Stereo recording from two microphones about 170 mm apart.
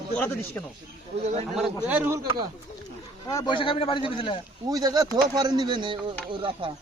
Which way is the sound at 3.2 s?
25° left (ahead or behind).